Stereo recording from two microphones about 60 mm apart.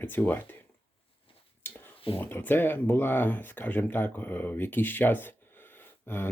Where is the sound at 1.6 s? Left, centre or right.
Left.